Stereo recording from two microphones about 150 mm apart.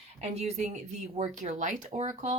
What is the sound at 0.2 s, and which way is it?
A woman's voice, 45° right (ahead or behind).